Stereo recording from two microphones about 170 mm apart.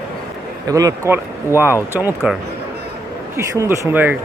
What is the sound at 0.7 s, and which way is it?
Speech, 20° right (ahead or behind).